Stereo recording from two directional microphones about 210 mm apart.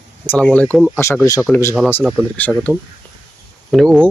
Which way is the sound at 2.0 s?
5° right (ahead or behind).